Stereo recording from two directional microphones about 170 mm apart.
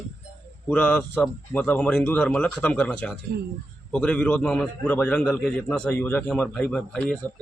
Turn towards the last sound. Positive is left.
turn(degrees=5)  # may be behind; listen again after turning